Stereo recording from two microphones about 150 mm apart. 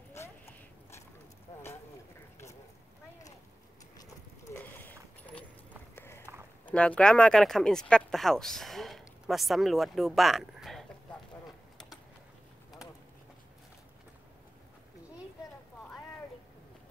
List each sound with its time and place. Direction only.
0.1 s a sound: 20° left (ahead or behind)
4.6 s clip-clop: 10° left (ahead or behind)
5.9 s run: 15° left (ahead or behind)
6.6 s speech: 10° left (ahead or behind)